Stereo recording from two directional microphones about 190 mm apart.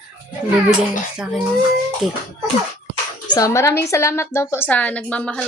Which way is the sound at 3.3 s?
15° left (ahead or behind).